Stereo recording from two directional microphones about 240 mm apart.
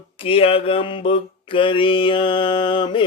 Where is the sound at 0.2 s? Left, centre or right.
Left.